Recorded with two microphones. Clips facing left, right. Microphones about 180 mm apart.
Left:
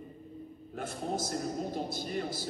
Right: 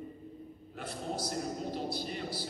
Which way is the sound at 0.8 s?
45° left (ahead or behind).